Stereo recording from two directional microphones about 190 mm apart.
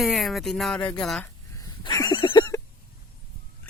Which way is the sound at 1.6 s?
20° left (ahead or behind).